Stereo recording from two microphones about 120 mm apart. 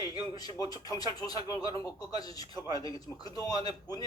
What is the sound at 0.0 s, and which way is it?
Speech, 35° left (ahead or behind).